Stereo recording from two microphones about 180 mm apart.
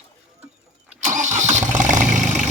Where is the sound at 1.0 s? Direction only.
45° right (ahead or behind).